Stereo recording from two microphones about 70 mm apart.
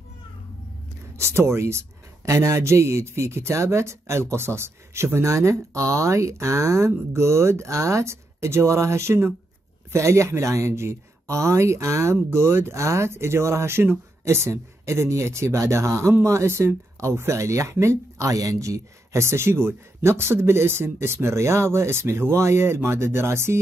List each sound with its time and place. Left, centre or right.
1.1 s speech: right